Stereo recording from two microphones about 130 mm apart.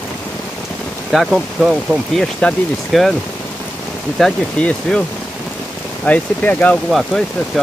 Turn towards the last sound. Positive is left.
turn(degrees=0)  # may be behind; listen again after turning